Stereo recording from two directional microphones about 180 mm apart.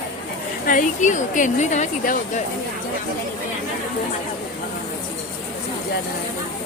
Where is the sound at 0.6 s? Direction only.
45° left (ahead or behind).